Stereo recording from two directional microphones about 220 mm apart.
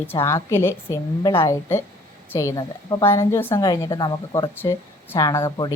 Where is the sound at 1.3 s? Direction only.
25° left (ahead or behind).